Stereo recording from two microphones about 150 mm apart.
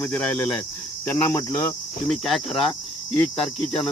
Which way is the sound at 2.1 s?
5° left (ahead or behind).